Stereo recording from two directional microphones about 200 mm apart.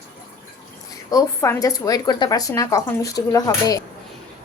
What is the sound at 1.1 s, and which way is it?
A woman's voice, 15° left (ahead or behind).